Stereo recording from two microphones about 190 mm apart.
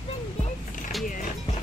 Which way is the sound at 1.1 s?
45° left (ahead or behind).